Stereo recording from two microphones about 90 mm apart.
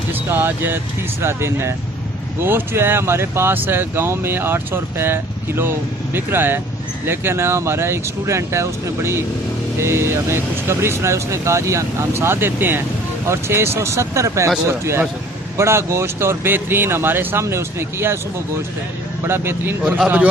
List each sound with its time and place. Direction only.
0.1 s vehicle: 25° right (ahead or behind)
1.2 s speech: 30° right (ahead or behind)